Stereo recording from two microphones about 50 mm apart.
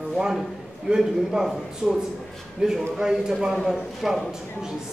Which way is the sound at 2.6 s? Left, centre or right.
Centre.